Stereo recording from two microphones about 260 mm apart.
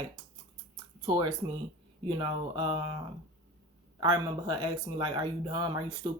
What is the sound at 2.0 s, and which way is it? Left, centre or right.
Speech, centre.